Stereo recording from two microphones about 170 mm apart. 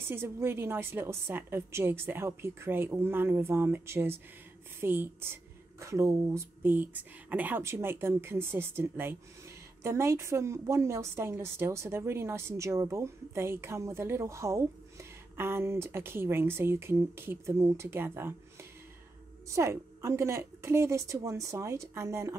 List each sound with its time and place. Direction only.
0.0 s a woman's voice: 15° right (ahead or behind)